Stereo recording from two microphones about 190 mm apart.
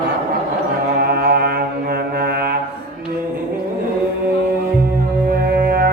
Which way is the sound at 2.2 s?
55° right (ahead or behind).